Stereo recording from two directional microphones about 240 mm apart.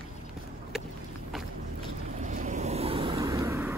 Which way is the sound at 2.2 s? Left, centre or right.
Right.